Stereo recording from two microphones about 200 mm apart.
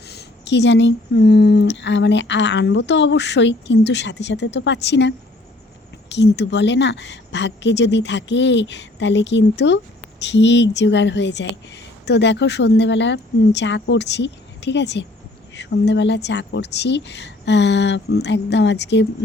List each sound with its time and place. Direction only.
0.1 s a woman's voice: 55° left (ahead or behind)